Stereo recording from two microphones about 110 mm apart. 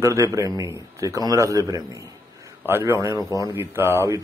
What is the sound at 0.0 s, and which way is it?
A man's voice, 25° right (ahead or behind).